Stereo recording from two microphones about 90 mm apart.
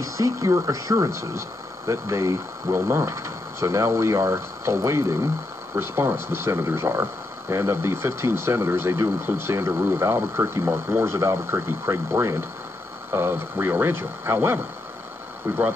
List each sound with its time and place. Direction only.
0.0 s speech: 35° right (ahead or behind)